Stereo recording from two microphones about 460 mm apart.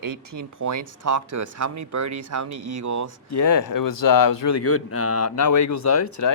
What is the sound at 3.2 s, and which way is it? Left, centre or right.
Speech, left.